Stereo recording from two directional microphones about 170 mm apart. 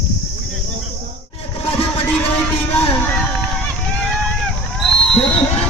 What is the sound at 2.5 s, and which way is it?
Music, 35° left (ahead or behind).